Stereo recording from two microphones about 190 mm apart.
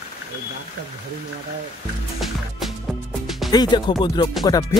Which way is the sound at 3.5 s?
20° left (ahead or behind).